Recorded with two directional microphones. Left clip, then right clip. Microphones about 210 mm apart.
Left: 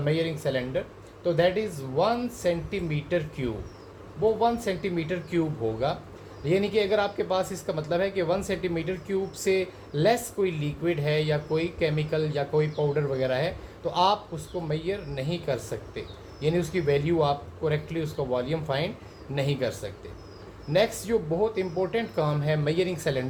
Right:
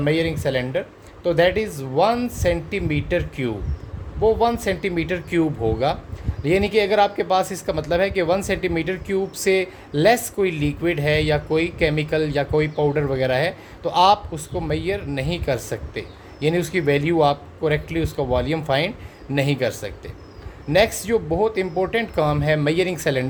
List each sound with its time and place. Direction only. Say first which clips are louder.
0.0 s speech: right 6 dB; 50° right (ahead or behind)